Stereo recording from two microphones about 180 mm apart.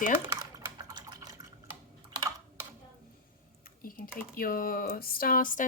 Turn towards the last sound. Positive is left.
turn(degrees=50)  # may be behind; listen again after turning